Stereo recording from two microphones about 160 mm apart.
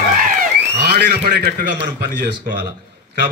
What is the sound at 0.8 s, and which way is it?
Speech, 80° right.